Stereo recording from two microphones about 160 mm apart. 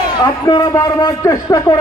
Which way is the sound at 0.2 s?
25° left (ahead or behind).